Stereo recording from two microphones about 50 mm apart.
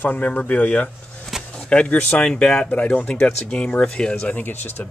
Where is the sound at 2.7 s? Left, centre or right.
Left.